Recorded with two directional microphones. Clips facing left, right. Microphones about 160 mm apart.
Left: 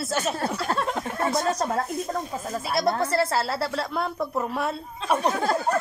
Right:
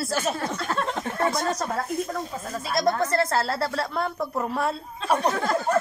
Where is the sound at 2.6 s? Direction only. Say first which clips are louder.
Right 1 dB; 5° left (ahead or behind).